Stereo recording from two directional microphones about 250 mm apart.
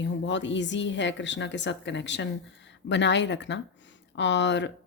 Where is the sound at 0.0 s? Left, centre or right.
Left.